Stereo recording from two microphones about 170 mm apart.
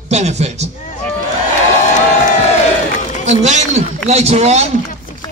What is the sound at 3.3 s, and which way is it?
A man's voice, 45° right (ahead or behind).